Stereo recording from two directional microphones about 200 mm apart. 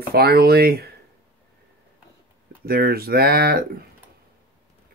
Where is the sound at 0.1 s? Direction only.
50° right (ahead or behind).